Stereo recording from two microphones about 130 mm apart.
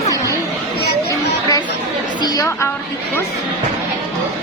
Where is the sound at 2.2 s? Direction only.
30° left (ahead or behind).